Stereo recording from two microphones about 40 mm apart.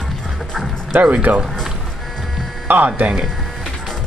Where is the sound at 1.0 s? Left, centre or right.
Right.